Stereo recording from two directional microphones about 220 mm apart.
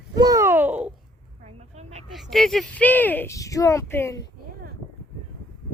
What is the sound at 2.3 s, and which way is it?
Speech, centre (ahead or behind).